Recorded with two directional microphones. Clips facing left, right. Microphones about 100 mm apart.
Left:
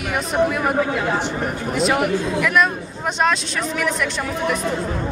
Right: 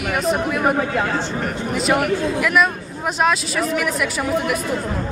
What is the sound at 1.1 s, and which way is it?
Speech, 15° left (ahead or behind).